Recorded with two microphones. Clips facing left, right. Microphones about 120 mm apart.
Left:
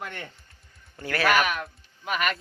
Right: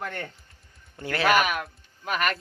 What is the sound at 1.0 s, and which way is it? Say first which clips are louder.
Speech: even; 25° right (ahead or behind).